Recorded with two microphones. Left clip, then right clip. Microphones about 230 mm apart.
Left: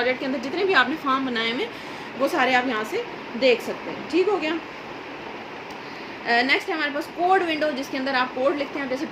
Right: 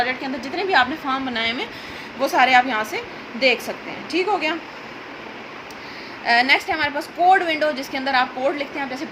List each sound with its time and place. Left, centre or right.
0.0 s a woman's voice: right
6.2 s a woman's voice: right